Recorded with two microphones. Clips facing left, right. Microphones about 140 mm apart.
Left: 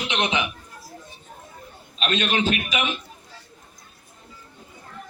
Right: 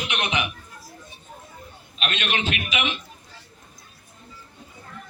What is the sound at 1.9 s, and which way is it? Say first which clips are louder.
A man's voice: left 4 dB; 35° left (ahead or behind).